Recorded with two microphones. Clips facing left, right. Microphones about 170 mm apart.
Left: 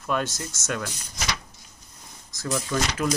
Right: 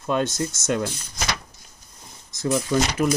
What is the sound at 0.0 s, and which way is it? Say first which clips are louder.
Speech: right 4 dB; 20° right (ahead or behind).